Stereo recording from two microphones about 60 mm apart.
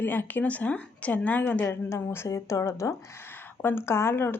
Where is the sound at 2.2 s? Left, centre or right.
Left.